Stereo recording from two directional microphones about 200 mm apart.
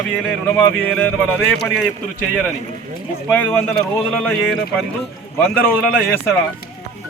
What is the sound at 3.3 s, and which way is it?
A man's voice, 10° left (ahead or behind).